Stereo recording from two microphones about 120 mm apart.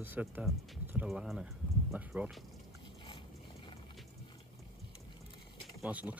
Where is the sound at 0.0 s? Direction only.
15° right (ahead or behind).